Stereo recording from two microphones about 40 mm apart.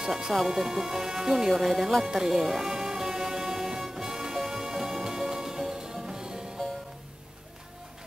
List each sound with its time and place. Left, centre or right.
0.0 s speech: centre
2.0 s music: centre